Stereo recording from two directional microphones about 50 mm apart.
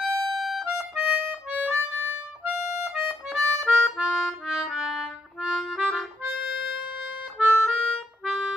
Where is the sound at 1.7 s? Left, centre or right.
Right.